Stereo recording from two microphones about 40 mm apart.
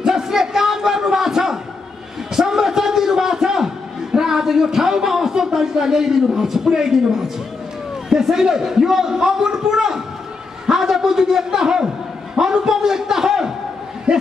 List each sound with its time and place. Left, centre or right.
0.0 s crowd: centre
2.3 s a sound: centre
8.1 s a man's voice: centre